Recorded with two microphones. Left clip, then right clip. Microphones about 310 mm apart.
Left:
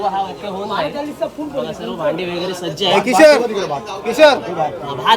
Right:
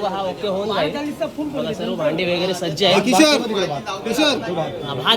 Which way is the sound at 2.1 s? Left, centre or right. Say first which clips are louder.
Right 2 dB; centre.